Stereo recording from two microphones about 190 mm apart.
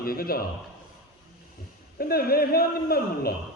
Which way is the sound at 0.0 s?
50° left (ahead or behind).